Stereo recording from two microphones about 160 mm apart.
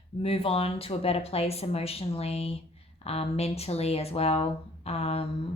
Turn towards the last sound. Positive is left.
turn(degrees=40)  # may be behind; listen again after turning